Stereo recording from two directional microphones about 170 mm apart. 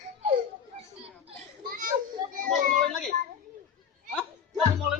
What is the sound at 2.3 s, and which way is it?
Child singing, 50° right (ahead or behind).